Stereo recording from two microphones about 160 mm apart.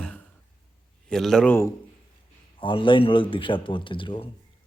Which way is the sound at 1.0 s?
5° left (ahead or behind).